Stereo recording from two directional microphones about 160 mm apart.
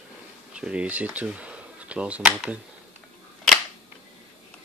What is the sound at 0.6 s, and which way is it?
Speech, 5° right (ahead or behind).